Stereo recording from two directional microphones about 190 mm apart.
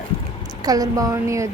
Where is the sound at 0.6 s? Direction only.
20° right (ahead or behind).